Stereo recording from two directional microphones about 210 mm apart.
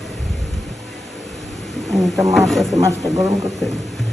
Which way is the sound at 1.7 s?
Centre (ahead or behind).